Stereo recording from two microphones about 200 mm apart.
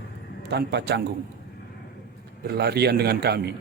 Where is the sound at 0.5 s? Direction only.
55° right (ahead or behind).